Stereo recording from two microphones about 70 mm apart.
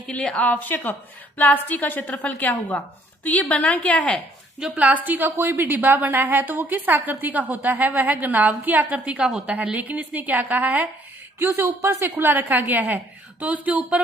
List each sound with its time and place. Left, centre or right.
0.1 s a woman's voice: centre
4.6 s a woman's voice: centre
9.2 s a woman's voice: centre
9.6 s a woman's voice: right
11.3 s speech: right
12.2 s a woman's voice: right